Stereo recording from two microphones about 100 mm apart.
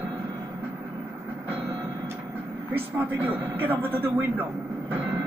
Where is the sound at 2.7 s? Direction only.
20° right (ahead or behind).